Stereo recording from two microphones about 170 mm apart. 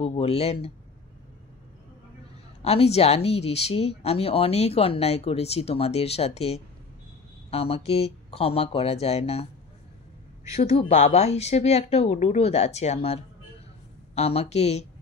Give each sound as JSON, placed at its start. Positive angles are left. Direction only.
{"t": 0.0, "sound": "speech", "side_deg": 35}
{"t": 2.6, "sound": "speech", "side_deg": 35}
{"t": 10.5, "sound": "speech", "side_deg": 35}